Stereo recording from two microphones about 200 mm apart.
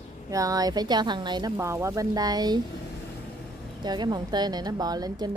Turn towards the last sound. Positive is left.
turn(degrees=-20)  # may be behind; listen again after turning